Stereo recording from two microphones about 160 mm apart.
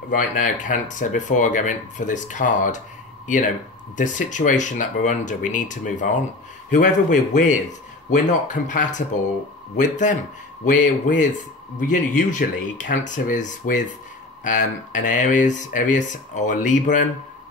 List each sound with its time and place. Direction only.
0.1 s speech: 55° left (ahead or behind)